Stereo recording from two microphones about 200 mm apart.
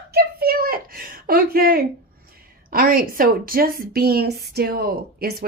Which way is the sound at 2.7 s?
45° right (ahead or behind).